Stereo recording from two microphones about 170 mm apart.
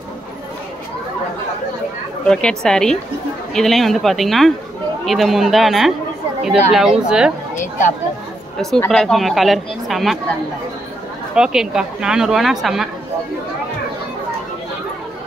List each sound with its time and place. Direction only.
2.2 s a woman's voice: 5° left (ahead or behind)
7.5 s a sound: 45° left (ahead or behind)
8.5 s a woman's voice: centre (ahead or behind)
11.3 s a woman's voice: 5° right (ahead or behind)